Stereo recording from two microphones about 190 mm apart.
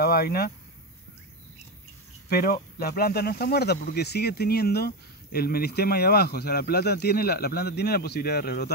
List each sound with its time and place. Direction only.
0.0 s speech: 55° left (ahead or behind)
2.2 s speech: 50° left (ahead or behind)